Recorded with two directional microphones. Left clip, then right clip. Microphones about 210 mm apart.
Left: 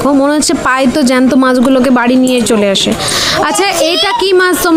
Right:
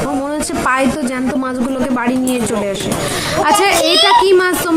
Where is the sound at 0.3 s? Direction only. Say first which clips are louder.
Left 6 dB; 35° left (ahead or behind).